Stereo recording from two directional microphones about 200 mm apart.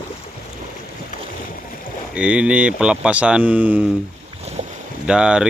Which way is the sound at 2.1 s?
5° right (ahead or behind).